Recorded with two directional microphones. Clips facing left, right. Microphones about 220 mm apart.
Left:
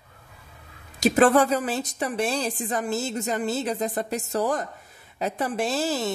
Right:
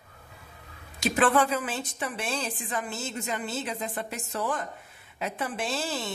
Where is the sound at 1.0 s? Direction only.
40° left (ahead or behind).